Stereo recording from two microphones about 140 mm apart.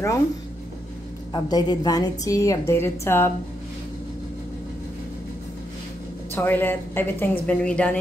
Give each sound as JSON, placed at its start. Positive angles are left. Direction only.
{"t": 1.3, "sound": "a woman's voice", "side_deg": 30}
{"t": 6.3, "sound": "a woman's voice", "side_deg": 15}